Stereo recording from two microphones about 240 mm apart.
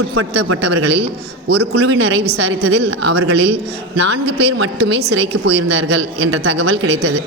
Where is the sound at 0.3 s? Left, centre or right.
Right.